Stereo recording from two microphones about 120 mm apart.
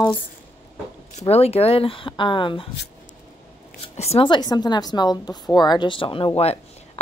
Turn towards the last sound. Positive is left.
turn(degrees=45)  # may be behind; listen again after turning